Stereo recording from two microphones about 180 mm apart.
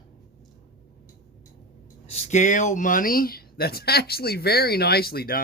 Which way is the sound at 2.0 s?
40° left (ahead or behind).